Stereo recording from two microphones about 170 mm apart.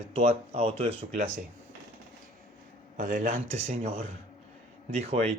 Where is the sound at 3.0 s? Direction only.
50° right (ahead or behind).